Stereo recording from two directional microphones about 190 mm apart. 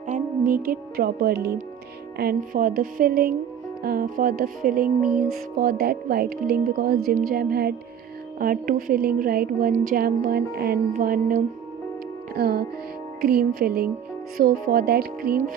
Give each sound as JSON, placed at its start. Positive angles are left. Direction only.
{"t": 0.1, "sound": "a woman's voice", "side_deg": -45}